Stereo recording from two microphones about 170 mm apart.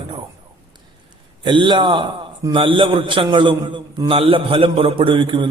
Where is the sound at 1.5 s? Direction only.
30° right (ahead or behind).